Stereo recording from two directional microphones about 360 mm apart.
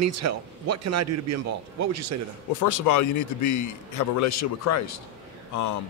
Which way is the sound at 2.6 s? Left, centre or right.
Left.